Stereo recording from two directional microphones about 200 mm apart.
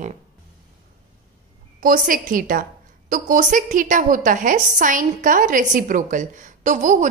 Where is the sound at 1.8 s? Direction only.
45° right (ahead or behind).